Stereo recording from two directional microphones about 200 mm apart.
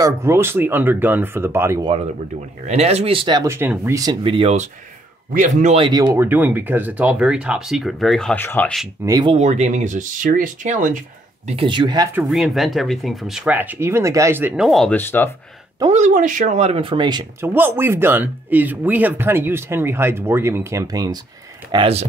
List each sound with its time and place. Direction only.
0.0 s speech: 15° right (ahead or behind)
2.6 s speech: 35° right (ahead or behind)
5.9 s speech: 20° right (ahead or behind); by 8.8 s 5° left (ahead or behind)
9.0 s speech: 20° right (ahead or behind); by 11.0 s 40° right (ahead or behind)
11.4 s speech: 25° right (ahead or behind)
12.1 s speech: 5° right (ahead or behind); by 15.2 s 10° left (ahead or behind)
15.9 s speech: 40° right (ahead or behind)
17.4 s speech: 10° right (ahead or behind)
21.7 s speech: 30° right (ahead or behind)